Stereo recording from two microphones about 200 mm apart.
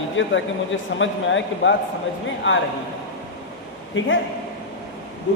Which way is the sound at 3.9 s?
70° left (ahead or behind).